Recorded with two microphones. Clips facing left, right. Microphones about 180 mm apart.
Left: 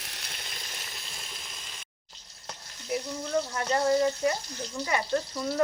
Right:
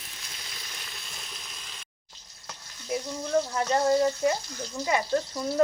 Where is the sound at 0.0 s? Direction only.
75° left (ahead or behind).